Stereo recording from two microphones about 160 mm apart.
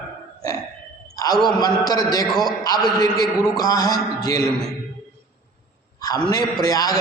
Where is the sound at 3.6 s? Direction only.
25° left (ahead or behind).